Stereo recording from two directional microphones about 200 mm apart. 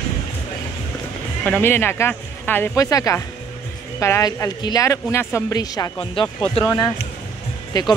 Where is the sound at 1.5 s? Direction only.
10° left (ahead or behind); by 6.7 s 25° left (ahead or behind).